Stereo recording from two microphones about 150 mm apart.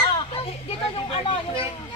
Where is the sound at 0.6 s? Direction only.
40° left (ahead or behind).